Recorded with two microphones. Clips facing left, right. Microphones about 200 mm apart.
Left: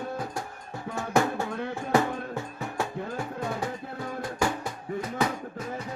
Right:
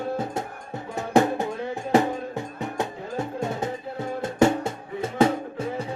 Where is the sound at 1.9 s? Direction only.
20° right (ahead or behind).